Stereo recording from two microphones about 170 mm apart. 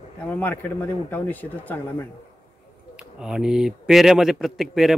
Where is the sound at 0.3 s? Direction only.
10° left (ahead or behind).